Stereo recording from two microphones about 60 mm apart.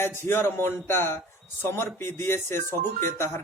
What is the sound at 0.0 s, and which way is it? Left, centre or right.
A man's voice, left.